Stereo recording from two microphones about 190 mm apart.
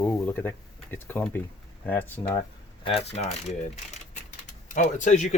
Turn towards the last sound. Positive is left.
turn(degrees=40)  # may be behind; listen again after turning